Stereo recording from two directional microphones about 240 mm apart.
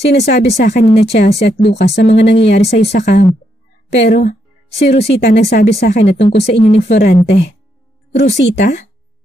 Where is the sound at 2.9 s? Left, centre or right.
Left.